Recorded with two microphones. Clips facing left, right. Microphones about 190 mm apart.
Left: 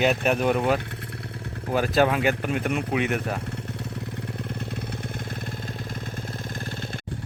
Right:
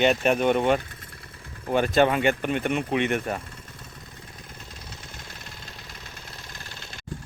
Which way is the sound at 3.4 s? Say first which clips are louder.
Left 11 dB; 65° left (ahead or behind).